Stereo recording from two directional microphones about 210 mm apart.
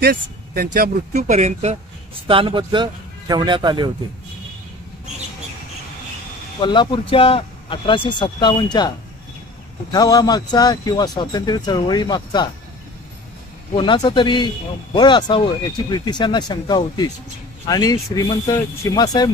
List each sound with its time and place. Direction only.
0.0 s speech: 45° right (ahead or behind)
1.1 s speech: 35° right (ahead or behind)
6.6 s a man's voice: 20° left (ahead or behind)
13.7 s a man's voice: 20° left (ahead or behind)